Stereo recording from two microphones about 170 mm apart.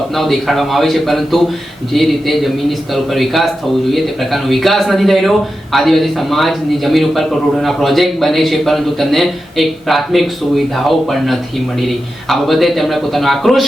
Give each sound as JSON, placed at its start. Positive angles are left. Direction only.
{"t": 0.2, "sound": "a man's voice", "side_deg": 0}